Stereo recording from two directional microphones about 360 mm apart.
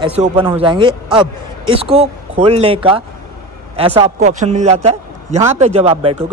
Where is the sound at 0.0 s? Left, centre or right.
Centre.